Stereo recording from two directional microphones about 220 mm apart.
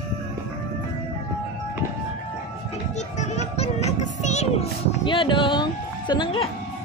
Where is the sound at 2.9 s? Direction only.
30° left (ahead or behind).